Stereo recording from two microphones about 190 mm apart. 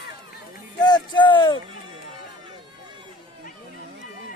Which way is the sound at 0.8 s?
20° left (ahead or behind).